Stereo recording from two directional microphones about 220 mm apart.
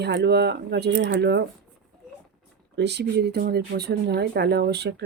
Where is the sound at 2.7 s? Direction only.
50° right (ahead or behind).